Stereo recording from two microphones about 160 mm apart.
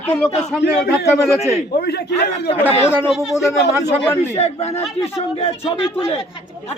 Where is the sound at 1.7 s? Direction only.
85° left.